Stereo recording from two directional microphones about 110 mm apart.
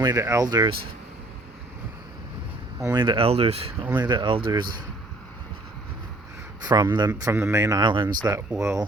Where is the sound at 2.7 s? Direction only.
25° right (ahead or behind).